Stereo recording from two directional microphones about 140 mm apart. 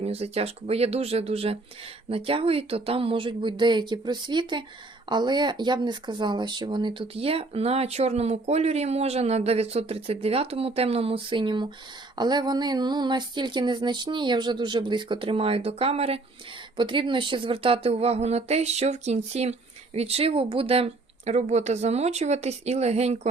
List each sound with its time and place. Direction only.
0.0 s speech: 45° right (ahead or behind)